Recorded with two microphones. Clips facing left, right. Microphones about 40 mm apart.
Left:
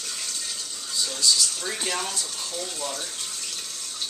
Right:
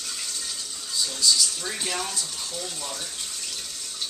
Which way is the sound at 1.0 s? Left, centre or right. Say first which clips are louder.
Even; centre.